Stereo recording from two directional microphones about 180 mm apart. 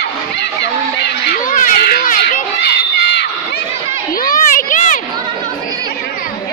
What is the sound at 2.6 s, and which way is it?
Crowd, 70° left (ahead or behind).